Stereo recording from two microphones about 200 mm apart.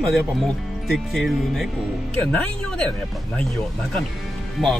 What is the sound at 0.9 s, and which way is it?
Speech, centre (ahead or behind).